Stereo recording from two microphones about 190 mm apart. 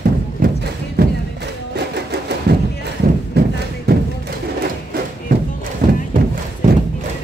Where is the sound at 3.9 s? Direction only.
55° right (ahead or behind).